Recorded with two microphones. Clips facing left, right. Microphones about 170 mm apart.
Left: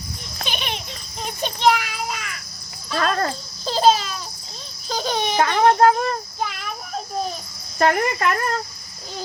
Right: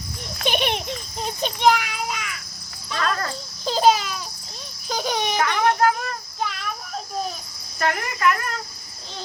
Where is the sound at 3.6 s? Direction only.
15° right (ahead or behind).